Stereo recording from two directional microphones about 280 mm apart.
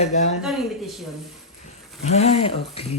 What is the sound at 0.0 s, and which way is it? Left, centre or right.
Speech, left.